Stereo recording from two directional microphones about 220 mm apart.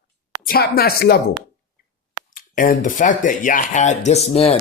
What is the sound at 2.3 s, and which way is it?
Speech, 40° left (ahead or behind).